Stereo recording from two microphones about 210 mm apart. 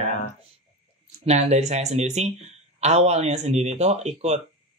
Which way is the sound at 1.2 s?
30° right (ahead or behind).